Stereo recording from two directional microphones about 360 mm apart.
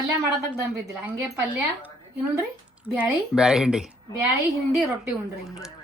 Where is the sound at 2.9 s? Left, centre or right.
Centre.